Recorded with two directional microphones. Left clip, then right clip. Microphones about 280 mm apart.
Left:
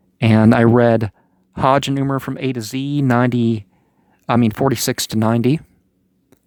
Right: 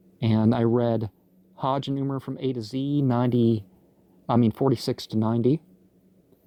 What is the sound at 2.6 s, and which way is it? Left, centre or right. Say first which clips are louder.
Speech: left 5 dB; left.